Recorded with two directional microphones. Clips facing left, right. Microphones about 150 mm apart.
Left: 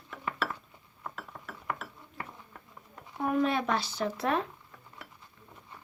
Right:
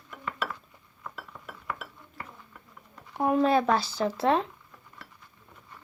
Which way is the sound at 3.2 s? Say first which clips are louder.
Right 5 dB; 30° right (ahead or behind).